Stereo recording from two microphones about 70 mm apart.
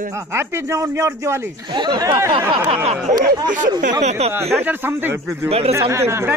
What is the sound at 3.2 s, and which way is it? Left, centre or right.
Speech, right.